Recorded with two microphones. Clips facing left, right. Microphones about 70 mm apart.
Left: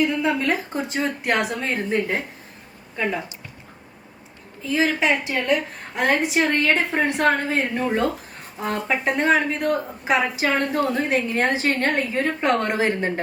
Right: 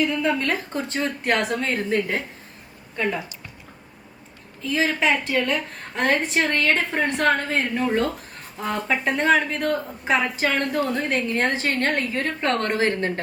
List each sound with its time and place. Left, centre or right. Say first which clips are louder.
0.0 s a woman's voice: left 1 dB; centre
1.9 s speech: left 1 dB; centre
4.7 s a woman's voice: left 1 dB; centre